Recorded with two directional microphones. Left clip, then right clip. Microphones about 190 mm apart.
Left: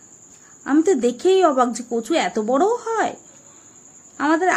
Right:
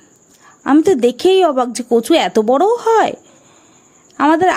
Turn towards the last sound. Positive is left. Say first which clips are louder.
# right 7 dB
turn(degrees=-50)  # may be behind; listen again after turning